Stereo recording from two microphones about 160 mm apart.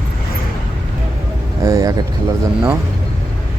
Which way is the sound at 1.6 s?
20° right (ahead or behind).